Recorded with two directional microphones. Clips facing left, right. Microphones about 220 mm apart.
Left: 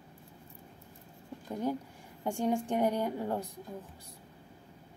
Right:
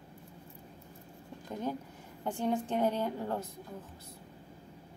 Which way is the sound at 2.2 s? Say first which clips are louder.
Left 1 dB; 15° left (ahead or behind).